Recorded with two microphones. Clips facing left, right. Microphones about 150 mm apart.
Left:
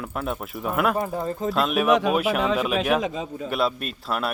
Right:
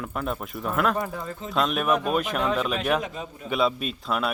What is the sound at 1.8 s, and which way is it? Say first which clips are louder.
Speech: left 4 dB; 90° left.